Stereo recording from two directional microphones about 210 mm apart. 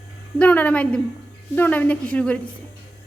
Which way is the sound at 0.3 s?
5° left (ahead or behind).